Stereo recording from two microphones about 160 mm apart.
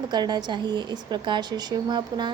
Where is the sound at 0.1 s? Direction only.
25° right (ahead or behind).